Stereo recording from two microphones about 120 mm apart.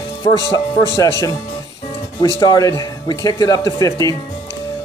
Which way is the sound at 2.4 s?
30° left (ahead or behind).